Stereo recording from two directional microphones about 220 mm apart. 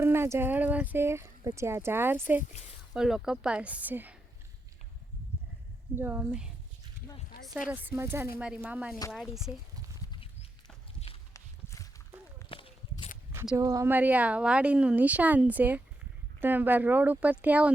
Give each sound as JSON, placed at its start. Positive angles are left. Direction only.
{"t": 0.0, "sound": "speech", "side_deg": -10}
{"t": 6.0, "sound": "speech", "side_deg": -10}
{"t": 11.3, "sound": "walk", "side_deg": 15}
{"t": 13.3, "sound": "a sound", "side_deg": -5}
{"t": 13.6, "sound": "speech", "side_deg": -15}